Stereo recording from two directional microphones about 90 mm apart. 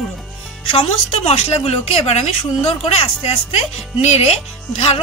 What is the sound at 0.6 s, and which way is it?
Speech, 90° left.